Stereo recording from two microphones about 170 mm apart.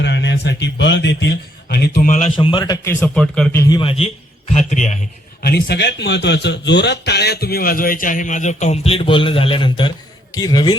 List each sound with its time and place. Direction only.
0.0 s speech: 90° left
1.7 s speech: 70° left (ahead or behind)
2.0 s a man's voice: 45° left (ahead or behind)
2.3 s a man's voice: 30° left (ahead or behind)
2.8 s speech: 10° left (ahead or behind)
3.6 s a man's voice: 25° left (ahead or behind)
4.5 s a man's voice: 45° left (ahead or behind)
5.5 s a man's voice: 70° left (ahead or behind); by 10.8 s 25° left (ahead or behind)